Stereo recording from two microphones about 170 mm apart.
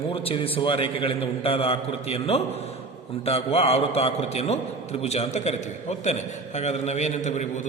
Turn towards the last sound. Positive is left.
turn(degrees=40)  # may be behind; listen again after turning